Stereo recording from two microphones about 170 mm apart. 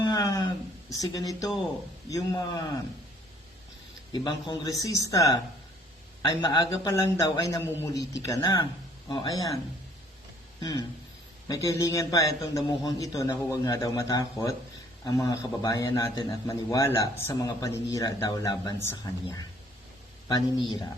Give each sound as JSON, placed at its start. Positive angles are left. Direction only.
{"t": 0.0, "sound": "a sound", "side_deg": 25}
{"t": 2.0, "sound": "a man's voice", "side_deg": 20}
{"t": 4.1, "sound": "a man's voice", "side_deg": 25}
{"t": 6.4, "sound": "a man's voice", "side_deg": 20}
{"t": 10.6, "sound": "a sound", "side_deg": 25}
{"t": 11.4, "sound": "a man's voice", "side_deg": 20}